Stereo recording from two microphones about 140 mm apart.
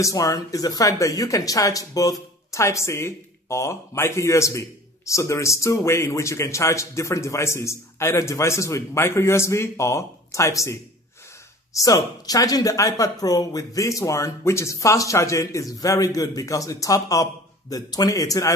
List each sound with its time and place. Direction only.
0.0 s speech: 25° left (ahead or behind)
11.8 s speech: 25° left (ahead or behind)